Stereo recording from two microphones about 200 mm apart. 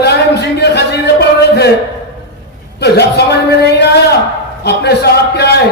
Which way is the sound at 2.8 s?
55° left (ahead or behind).